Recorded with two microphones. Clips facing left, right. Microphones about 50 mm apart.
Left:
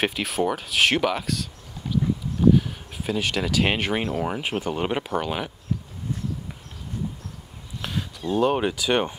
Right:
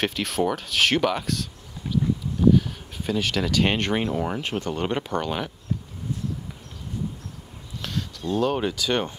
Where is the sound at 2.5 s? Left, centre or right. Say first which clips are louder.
Even; centre.